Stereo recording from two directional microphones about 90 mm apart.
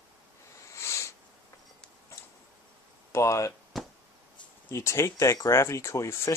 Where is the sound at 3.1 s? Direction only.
35° left (ahead or behind).